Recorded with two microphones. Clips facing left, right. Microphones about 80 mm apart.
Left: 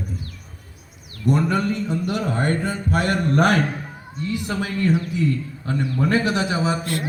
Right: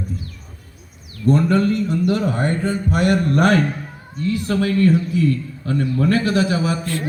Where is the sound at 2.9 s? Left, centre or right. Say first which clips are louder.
Right 4 dB; left.